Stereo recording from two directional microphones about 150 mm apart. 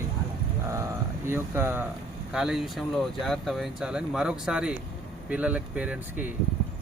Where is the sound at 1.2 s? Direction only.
15° right (ahead or behind).